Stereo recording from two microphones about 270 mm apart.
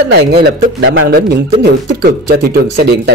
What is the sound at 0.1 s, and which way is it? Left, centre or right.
Speech, right.